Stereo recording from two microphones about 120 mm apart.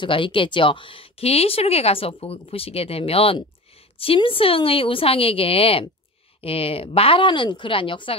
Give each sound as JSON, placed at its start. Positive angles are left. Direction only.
{"t": 0.0, "sound": "speech", "side_deg": 45}